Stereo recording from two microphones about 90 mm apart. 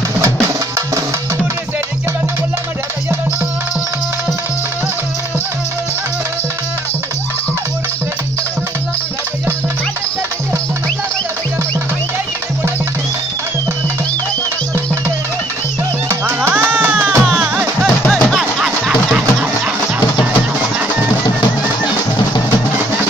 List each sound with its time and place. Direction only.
16.1 s music: 25° right (ahead or behind)
17.3 s music: 5° right (ahead or behind)
18.0 s music: 5° left (ahead or behind)